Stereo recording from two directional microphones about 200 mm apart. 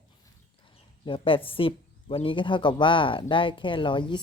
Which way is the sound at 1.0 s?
25° left (ahead or behind).